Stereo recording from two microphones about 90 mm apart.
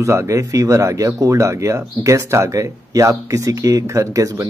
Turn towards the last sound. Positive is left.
turn(degrees=-40)  # may be behind; listen again after turning